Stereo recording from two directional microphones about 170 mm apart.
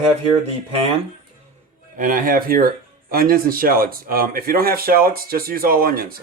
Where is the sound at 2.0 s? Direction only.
55° right (ahead or behind).